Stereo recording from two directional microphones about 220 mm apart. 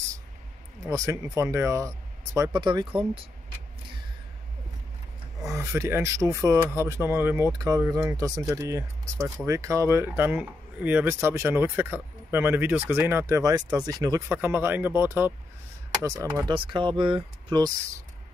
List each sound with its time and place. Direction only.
0.8 s speech: 15° right (ahead or behind)
5.5 s speech: 10° right (ahead or behind)